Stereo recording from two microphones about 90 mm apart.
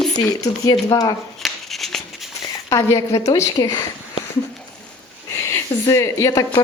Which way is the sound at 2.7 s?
35° left (ahead or behind).